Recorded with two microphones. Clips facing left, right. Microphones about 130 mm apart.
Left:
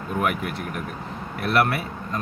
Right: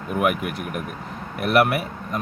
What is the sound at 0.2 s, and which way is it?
Speech, 15° right (ahead or behind).